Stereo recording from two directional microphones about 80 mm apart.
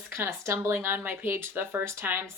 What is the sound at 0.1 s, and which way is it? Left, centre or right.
Speech, right.